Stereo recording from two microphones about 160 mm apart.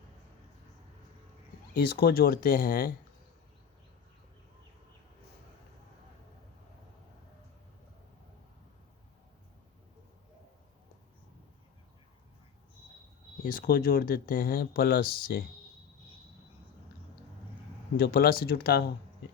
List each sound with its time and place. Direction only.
1.7 s speech: 85° left; by 2.9 s 65° left (ahead or behind)
13.4 s speech: 60° left (ahead or behind)
17.9 s speech: 70° left (ahead or behind)